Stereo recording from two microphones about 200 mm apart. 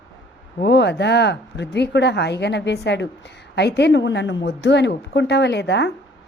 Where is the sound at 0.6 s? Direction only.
60° left (ahead or behind).